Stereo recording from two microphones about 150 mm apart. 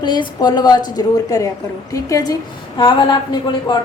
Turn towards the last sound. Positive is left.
turn(degrees=30)  # may be behind; listen again after turning